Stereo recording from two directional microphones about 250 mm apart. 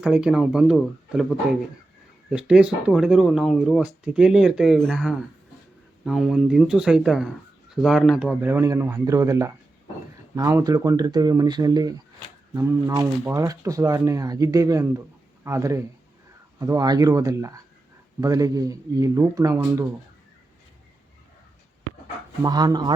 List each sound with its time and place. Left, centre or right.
0.0 s speech: centre
22.4 s speech: centre